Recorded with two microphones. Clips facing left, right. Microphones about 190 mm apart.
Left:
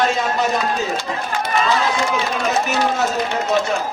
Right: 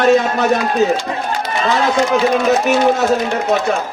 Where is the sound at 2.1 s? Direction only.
60° right (ahead or behind).